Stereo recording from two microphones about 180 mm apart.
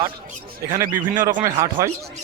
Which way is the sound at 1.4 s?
20° right (ahead or behind).